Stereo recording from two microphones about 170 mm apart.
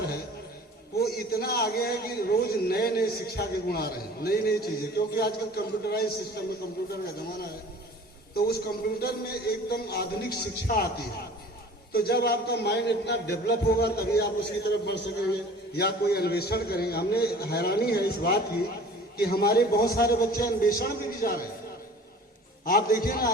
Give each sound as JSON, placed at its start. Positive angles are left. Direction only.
{"t": 0.9, "sound": "a man's voice", "side_deg": 65}
{"t": 11.9, "sound": "a man's voice", "side_deg": 65}
{"t": 22.6, "sound": "a man's voice", "side_deg": 60}